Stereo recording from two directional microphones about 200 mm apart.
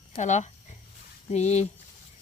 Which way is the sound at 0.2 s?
35° left (ahead or behind).